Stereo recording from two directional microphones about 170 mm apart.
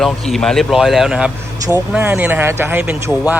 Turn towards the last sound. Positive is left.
turn(degrees=-10)  # may be behind; listen again after turning